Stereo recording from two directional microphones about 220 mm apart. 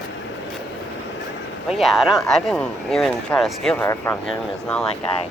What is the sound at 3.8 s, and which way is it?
Speech, 15° left (ahead or behind).